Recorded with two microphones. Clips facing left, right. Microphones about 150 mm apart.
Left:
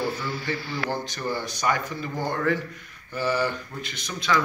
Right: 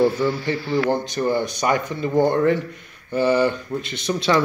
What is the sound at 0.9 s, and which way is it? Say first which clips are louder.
Speech: right 8 dB; 20° right (ahead or behind).